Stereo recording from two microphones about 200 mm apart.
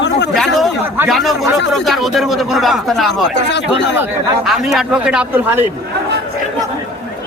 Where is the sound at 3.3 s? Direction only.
60° left (ahead or behind).